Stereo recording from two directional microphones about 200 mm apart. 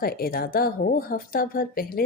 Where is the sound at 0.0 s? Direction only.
50° left (ahead or behind).